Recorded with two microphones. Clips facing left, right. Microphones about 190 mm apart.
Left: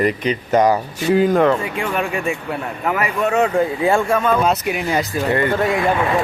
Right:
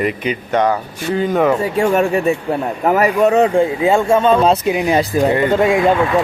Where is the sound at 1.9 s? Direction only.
40° right (ahead or behind).